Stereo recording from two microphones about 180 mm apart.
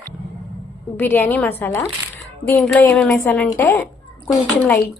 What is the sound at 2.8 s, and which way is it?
A woman's voice, 5° left (ahead or behind).